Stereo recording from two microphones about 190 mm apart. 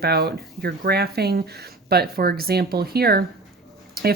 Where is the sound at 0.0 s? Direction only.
55° right (ahead or behind).